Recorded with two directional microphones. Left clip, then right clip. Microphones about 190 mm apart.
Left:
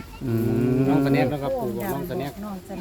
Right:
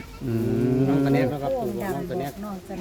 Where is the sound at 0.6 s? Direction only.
10° left (ahead or behind).